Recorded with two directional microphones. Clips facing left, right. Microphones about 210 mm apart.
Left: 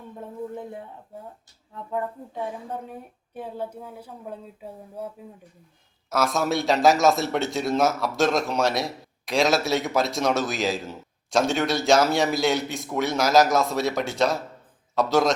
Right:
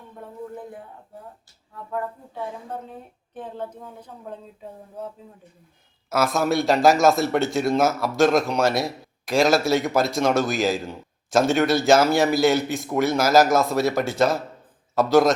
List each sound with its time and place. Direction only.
0.5 s a sound: 25° left (ahead or behind)
1.7 s speech: 20° left (ahead or behind)
6.1 s a man's voice: centre (ahead or behind)